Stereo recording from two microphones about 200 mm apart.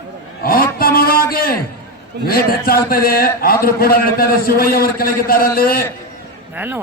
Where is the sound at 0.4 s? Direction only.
45° left (ahead or behind).